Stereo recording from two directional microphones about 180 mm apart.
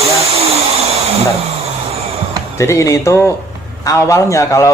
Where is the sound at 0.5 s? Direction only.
35° right (ahead or behind).